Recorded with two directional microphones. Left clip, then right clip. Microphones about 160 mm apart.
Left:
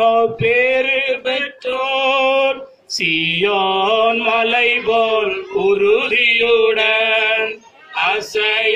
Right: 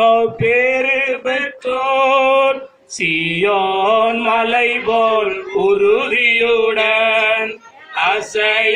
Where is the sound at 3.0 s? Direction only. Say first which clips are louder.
Even; 5° right (ahead or behind).